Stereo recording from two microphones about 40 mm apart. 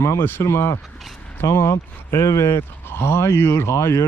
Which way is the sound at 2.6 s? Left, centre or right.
Left.